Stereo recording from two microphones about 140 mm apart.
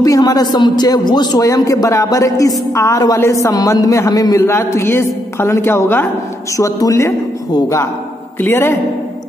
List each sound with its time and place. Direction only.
0.0 s a man's voice: 25° left (ahead or behind)